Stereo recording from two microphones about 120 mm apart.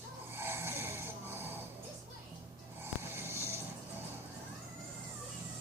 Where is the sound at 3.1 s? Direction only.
20° right (ahead or behind).